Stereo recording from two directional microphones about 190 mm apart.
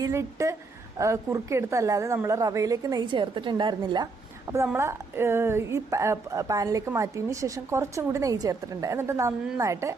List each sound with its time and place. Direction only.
0.0 s a woman's voice: 15° right (ahead or behind)